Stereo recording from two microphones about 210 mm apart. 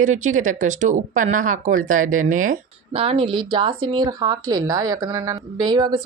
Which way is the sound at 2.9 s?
25° right (ahead or behind).